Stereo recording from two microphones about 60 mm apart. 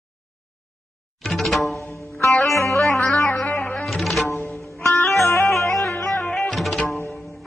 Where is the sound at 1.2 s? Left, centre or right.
Centre.